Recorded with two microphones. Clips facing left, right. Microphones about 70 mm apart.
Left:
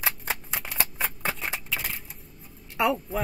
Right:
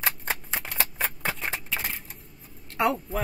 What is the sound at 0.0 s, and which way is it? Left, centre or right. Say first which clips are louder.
Scissors: right 1 dB; centre.